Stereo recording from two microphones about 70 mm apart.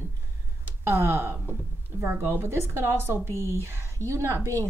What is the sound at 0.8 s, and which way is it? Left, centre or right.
Speech, right.